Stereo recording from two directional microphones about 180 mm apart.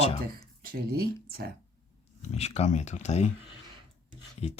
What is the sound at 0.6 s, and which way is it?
Speech, 55° right (ahead or behind).